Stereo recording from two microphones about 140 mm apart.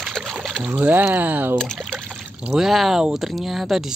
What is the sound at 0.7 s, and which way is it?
Speech, 15° right (ahead or behind).